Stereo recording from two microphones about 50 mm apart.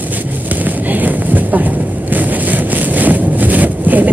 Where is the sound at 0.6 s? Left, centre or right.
Right.